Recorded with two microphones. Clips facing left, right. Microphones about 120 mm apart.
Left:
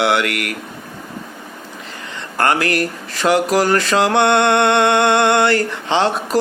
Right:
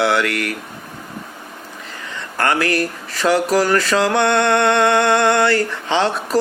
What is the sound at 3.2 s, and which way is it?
Speech, 15° left (ahead or behind).